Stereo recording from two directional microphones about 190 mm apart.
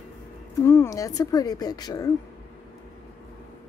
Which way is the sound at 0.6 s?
15° left (ahead or behind).